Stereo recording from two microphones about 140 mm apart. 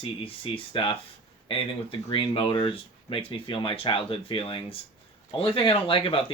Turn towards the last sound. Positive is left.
turn(degrees=40)  # may be behind; listen again after turning